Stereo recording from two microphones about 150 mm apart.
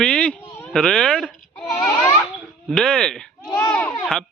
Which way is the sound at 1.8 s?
20° left (ahead or behind).